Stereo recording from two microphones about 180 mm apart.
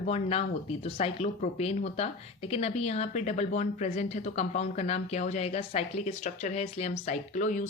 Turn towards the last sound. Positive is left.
turn(degrees=45)  # may be behind; listen again after turning